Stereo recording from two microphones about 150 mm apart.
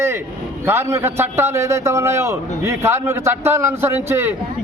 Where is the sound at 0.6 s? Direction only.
15° right (ahead or behind).